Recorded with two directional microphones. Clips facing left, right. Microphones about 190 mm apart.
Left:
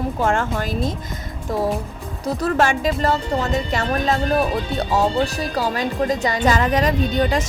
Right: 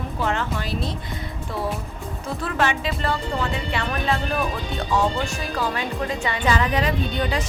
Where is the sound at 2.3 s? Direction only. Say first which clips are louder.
Left 5 dB; 40° left (ahead or behind).